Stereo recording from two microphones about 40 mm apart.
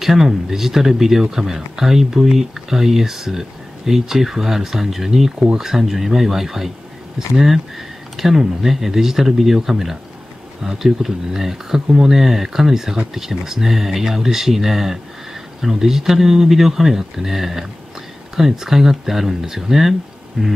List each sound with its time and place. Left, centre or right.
0.0 s speech: centre